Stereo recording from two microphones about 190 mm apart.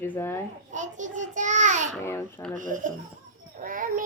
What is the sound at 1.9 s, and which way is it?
Speech, 15° left (ahead or behind).